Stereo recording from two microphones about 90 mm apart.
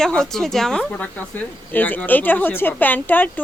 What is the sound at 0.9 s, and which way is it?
A woman's voice, 15° left (ahead or behind).